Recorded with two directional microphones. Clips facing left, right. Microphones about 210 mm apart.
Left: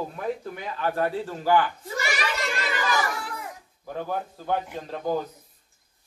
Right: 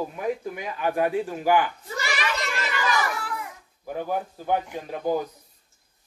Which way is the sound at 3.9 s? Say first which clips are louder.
Right 2 dB; 10° right (ahead or behind).